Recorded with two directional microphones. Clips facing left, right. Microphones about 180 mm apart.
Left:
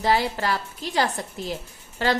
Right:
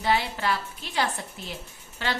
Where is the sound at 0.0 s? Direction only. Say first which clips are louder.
Left 3 dB; 40° left (ahead or behind).